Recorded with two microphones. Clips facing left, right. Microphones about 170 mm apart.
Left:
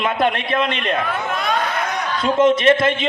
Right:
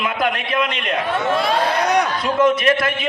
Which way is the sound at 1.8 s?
80° right.